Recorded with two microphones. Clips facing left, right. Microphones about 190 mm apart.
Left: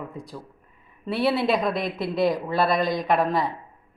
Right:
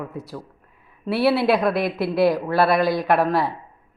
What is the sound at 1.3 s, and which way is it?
Speech, 65° right (ahead or behind).